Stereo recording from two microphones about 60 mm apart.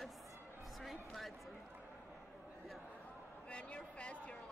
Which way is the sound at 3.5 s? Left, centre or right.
Centre.